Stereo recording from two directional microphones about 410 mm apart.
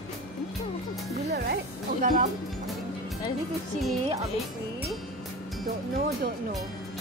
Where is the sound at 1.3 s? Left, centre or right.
Right.